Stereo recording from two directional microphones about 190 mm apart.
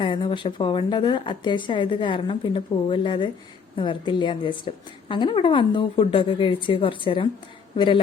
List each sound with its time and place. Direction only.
0.0 s a woman's voice: 25° left (ahead or behind)